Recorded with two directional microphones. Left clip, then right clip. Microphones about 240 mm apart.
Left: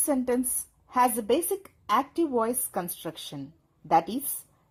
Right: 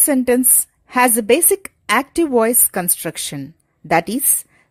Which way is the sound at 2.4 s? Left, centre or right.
Right.